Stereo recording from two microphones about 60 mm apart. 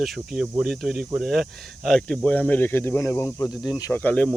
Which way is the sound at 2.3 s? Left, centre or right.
Left.